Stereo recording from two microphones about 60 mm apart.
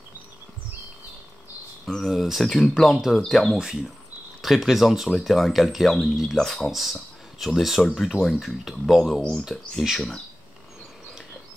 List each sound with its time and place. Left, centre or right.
1.9 s speech: centre
2.1 s speech: centre